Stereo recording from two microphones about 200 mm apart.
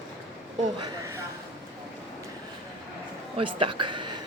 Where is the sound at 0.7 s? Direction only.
20° right (ahead or behind).